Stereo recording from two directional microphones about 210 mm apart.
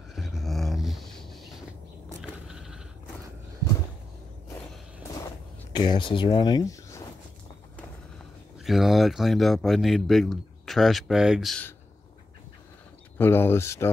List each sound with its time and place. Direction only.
0.1 s a sound: centre (ahead or behind)
5.7 s speech: 20° left (ahead or behind)
8.6 s a man's voice: centre (ahead or behind)
13.2 s speech: 10° left (ahead or behind)